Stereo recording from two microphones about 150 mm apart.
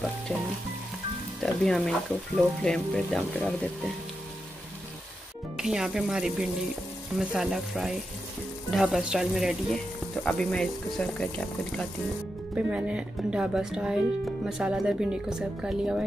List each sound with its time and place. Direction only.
1.4 s speech: centre (ahead or behind)
5.6 s speech: 5° right (ahead or behind)
12.5 s speech: 5° right (ahead or behind)